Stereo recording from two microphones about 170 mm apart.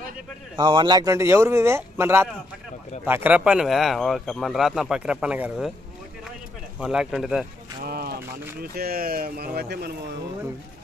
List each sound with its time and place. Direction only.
0.6 s speech: 25° right (ahead or behind); by 5.7 s 5° right (ahead or behind)
6.8 s speech: 5° right (ahead or behind)
7.8 s speech: 65° right (ahead or behind)